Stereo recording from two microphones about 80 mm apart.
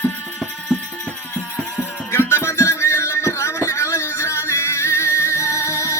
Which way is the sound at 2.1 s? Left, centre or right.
Left.